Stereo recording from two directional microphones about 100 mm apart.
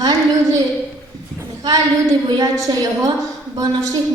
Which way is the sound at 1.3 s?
35° right (ahead or behind).